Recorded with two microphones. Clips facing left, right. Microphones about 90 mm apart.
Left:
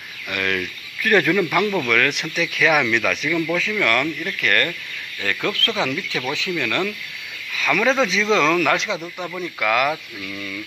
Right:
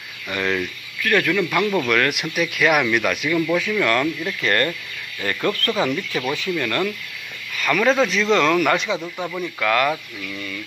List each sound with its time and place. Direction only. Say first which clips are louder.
0.3 s speech: right 1 dB; 5° right (ahead or behind)
1.0 s speech: left 2 dB; 15° left (ahead or behind)
1.4 s speech: even; 5° left (ahead or behind); by 4.6 s 15° right (ahead or behind)
5.2 s speech: right 2 dB; centre (ahead or behind)
9.6 s speech: even; 5° left (ahead or behind)